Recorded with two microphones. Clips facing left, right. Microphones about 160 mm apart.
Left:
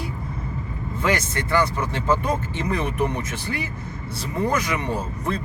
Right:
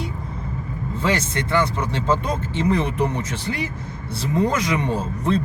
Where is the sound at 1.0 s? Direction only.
20° right (ahead or behind).